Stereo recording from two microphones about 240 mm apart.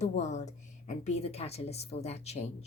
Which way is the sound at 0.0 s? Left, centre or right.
Left.